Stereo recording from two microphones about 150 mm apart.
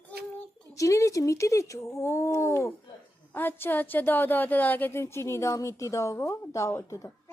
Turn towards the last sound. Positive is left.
turn(degrees=20)  # may be behind; listen again after turning